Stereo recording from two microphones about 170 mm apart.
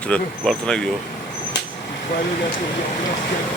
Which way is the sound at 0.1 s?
5° left (ahead or behind).